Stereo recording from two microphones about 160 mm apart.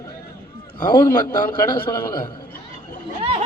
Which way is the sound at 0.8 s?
25° left (ahead or behind).